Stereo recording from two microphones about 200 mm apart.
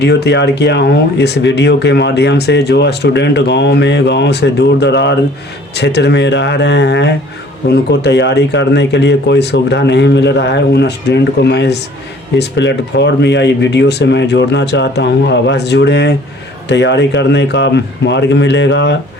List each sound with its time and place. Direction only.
0.0 s speech: 55° left (ahead or behind)